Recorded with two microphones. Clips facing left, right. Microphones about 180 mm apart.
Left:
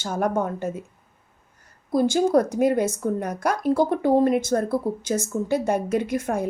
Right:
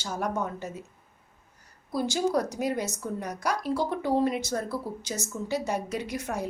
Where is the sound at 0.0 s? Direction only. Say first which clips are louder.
Left 6 dB; 55° left (ahead or behind).